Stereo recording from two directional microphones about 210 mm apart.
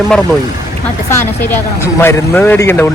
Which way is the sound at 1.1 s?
10° left (ahead or behind).